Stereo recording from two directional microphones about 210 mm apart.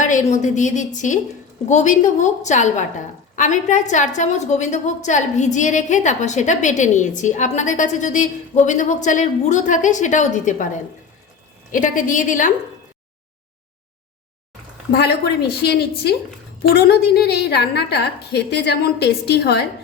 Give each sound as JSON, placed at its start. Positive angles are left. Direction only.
{"t": 0.0, "sound": "a woman's voice", "side_deg": 35}
{"t": 11.7, "sound": "a woman's voice", "side_deg": 40}
{"t": 14.9, "sound": "a woman's voice", "side_deg": 50}